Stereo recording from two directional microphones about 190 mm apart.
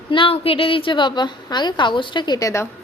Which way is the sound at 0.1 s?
30° left (ahead or behind).